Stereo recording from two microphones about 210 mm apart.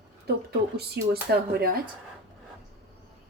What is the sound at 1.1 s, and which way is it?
Speech, 50° right (ahead or behind).